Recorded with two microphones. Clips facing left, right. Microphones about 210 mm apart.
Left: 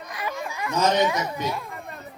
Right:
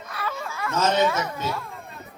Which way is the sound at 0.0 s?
15° left (ahead or behind).